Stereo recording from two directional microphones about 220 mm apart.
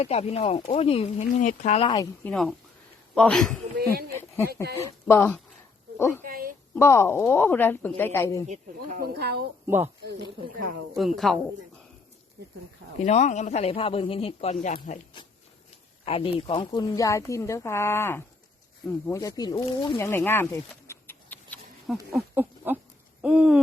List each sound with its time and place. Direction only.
0.0 s speech: 30° left (ahead or behind)
2.2 s speech: centre (ahead or behind)
4.7 s speech: 10° left (ahead or behind)
6.2 s a woman's voice: 40° right (ahead or behind)
6.7 s speech: 10° left (ahead or behind)
8.4 s speech: 40° right (ahead or behind)
9.6 s speech: 10° right (ahead or behind)
10.0 s speech: 50° right (ahead or behind)
10.9 s speech: centre (ahead or behind)
13.0 s speech: 35° left (ahead or behind); by 20.1 s 20° left (ahead or behind)
20.1 s a sound: 10° left (ahead or behind)
22.1 s a sound: 10° right (ahead or behind)
23.2 s speech: 5° right (ahead or behind)